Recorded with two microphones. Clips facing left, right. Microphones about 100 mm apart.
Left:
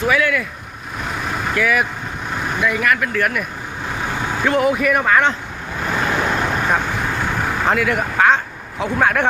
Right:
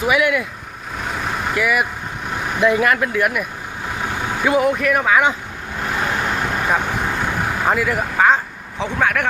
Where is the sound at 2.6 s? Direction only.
25° right (ahead or behind).